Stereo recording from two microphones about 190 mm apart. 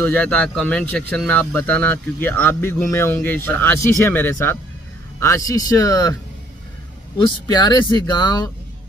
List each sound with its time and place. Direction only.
0.0 s speech: 10° left (ahead or behind)
7.2 s speech: 25° left (ahead or behind)